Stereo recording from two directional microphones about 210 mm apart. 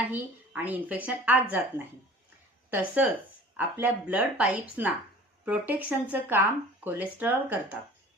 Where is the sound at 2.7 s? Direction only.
5° right (ahead or behind).